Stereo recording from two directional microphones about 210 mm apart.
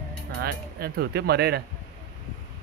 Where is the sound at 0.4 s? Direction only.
45° right (ahead or behind).